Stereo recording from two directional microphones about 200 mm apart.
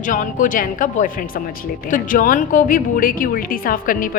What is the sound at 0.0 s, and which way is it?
A woman's voice, 40° left (ahead or behind).